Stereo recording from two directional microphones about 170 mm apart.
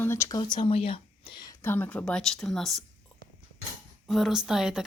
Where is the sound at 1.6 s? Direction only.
10° left (ahead or behind).